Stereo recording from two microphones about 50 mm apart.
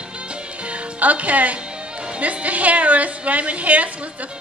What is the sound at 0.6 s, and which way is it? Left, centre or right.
Music, right.